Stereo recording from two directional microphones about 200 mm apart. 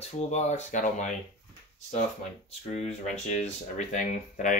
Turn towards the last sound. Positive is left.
turn(degrees=40)  # may be behind; listen again after turning